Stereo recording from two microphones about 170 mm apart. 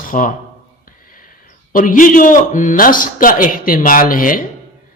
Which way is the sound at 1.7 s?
50° left (ahead or behind).